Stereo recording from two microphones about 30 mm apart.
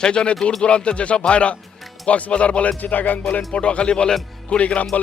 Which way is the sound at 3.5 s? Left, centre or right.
Left.